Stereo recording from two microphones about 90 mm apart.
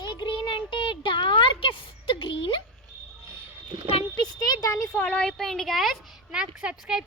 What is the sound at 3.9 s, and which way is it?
Speech, 55° left (ahead or behind).